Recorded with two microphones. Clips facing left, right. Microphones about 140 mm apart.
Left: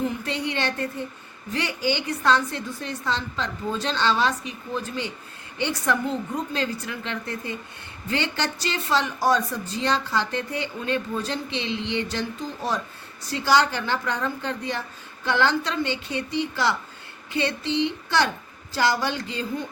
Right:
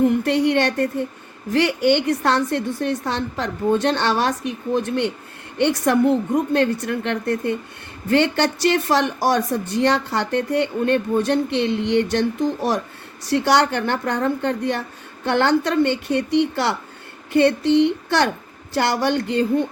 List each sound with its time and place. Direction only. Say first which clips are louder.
0.0 s speech: right 10 dB; 60° right (ahead or behind)